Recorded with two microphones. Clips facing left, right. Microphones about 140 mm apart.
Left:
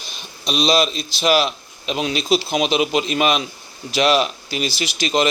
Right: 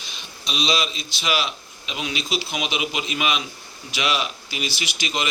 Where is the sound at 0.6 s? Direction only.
40° left (ahead or behind).